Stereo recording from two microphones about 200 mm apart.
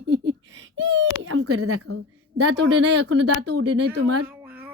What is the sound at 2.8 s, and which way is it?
Speech, 60° right (ahead or behind).